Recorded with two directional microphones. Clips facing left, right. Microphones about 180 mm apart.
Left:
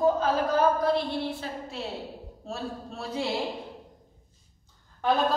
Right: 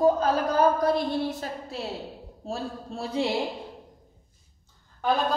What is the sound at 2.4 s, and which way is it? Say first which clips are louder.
Speech: right 2 dB; 30° right (ahead or behind).